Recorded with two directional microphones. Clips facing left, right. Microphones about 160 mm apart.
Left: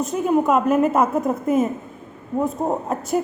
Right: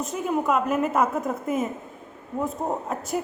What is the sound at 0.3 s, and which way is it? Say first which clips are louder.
Speech: left 6 dB; 35° left (ahead or behind).